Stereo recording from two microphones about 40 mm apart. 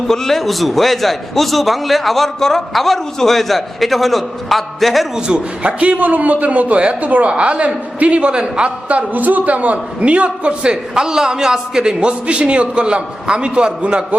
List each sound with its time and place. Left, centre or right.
0.1 s a man's voice: centre
5.3 s speech: centre
5.6 s a man's voice: right
8.9 s a man's voice: right; by 11.9 s centre
11.9 s a man's voice: right